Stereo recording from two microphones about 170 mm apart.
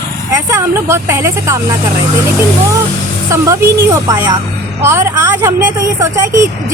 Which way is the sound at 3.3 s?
15° right (ahead or behind).